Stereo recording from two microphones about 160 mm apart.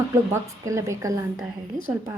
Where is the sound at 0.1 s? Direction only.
20° right (ahead or behind).